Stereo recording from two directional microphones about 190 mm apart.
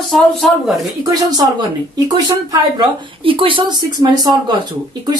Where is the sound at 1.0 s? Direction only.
20° right (ahead or behind).